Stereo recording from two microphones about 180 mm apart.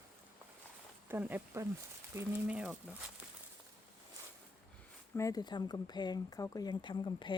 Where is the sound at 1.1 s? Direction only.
10° right (ahead or behind).